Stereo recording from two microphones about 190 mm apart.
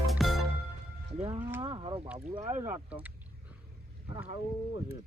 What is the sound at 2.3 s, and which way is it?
Speech, 35° right (ahead or behind).